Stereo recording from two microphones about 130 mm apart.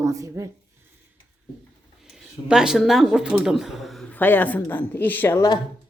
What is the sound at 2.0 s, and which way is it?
Speech, 5° right (ahead or behind).